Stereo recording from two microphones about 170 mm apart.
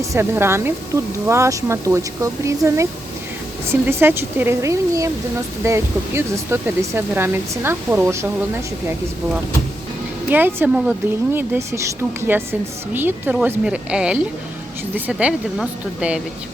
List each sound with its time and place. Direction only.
0.0 s speech: 15° right (ahead or behind)
10.2 s speech: 10° right (ahead or behind)